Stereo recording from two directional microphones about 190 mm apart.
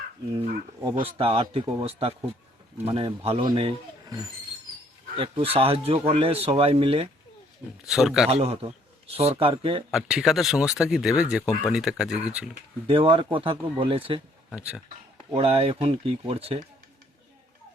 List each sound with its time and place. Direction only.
1.0 s speech: 30° right (ahead or behind)
5.1 s speech: 30° right (ahead or behind)
7.9 s speech: centre (ahead or behind)
8.3 s speech: 30° right (ahead or behind)
9.9 s speech: centre (ahead or behind)
12.9 s speech: 30° right (ahead or behind)
14.5 s speech: 5° right (ahead or behind)
15.3 s speech: 30° right (ahead or behind)